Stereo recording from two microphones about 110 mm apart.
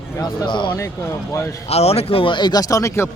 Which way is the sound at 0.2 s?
45° left (ahead or behind).